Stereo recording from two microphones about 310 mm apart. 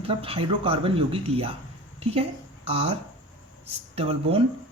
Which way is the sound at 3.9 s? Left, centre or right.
Centre.